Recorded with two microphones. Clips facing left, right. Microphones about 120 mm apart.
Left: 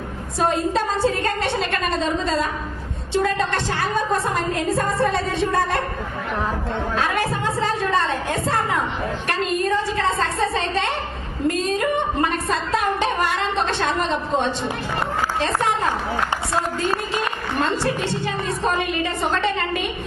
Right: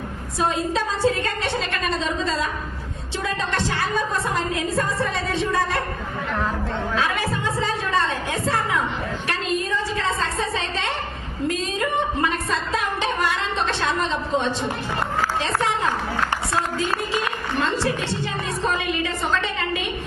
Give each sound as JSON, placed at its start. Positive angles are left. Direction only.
{"t": 0.3, "sound": "a woman's voice", "side_deg": 50}
{"t": 6.9, "sound": "a woman's voice", "side_deg": 50}
{"t": 18.6, "sound": "a woman's voice", "side_deg": 55}